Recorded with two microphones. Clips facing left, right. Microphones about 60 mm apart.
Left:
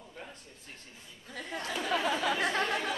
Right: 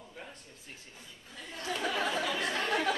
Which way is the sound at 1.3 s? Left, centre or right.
Left.